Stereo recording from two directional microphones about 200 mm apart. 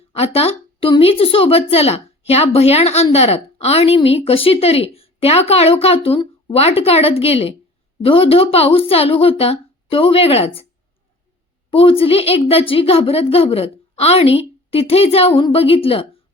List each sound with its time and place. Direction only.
0.1 s a woman's voice: 30° left (ahead or behind)
11.7 s a woman's voice: 30° left (ahead or behind)